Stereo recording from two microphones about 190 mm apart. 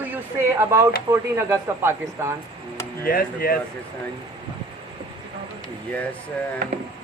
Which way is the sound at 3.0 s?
50° left (ahead or behind).